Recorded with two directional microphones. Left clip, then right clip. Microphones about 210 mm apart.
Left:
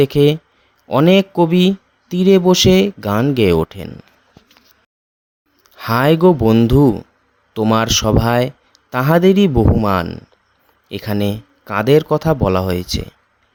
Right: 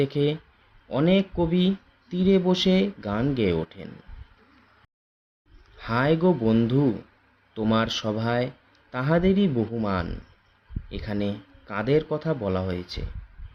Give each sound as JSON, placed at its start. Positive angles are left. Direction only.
{"t": 0.0, "sound": "speech", "side_deg": 50}
{"t": 5.7, "sound": "speech", "side_deg": 55}